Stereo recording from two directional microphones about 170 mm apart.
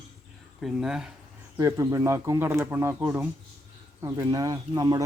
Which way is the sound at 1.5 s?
20° right (ahead or behind).